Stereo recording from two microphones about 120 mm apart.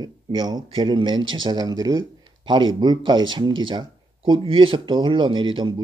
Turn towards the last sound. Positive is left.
turn(degrees=-45)  # may be behind; listen again after turning